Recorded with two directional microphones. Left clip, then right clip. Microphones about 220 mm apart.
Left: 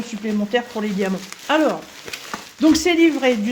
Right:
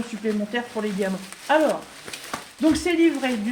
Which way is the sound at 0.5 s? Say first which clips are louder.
Left 5 dB; 55° left (ahead or behind).